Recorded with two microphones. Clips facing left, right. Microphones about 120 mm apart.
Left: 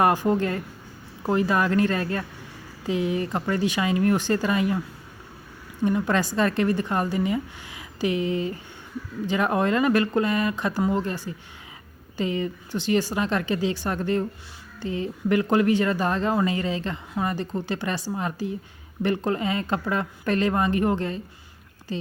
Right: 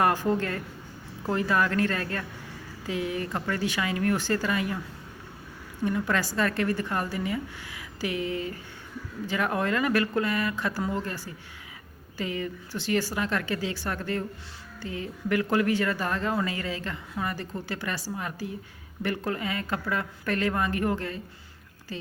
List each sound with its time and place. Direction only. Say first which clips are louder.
0.0 s speech: left 4 dB; 15° left (ahead or behind)
5.8 s speech: left 4 dB; 20° left (ahead or behind)